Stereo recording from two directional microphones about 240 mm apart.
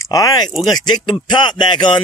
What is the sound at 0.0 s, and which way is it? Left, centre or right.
Speech, centre.